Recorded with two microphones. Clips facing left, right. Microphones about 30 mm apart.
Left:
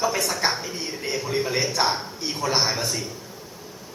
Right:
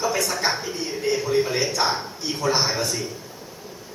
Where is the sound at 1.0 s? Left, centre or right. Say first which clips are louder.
Right 5 dB; centre.